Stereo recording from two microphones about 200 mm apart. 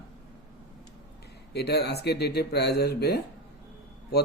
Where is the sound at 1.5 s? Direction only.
55° left (ahead or behind).